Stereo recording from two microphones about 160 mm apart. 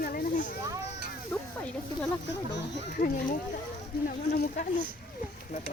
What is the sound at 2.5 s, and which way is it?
Speech, 90° left.